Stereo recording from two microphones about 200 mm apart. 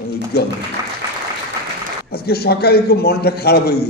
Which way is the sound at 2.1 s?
50° left (ahead or behind).